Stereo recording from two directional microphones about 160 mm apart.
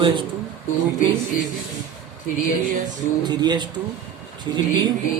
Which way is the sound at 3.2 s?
25° right (ahead or behind).